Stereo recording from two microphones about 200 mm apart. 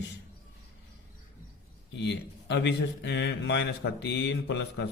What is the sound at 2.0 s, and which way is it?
A man's voice, 60° left (ahead or behind).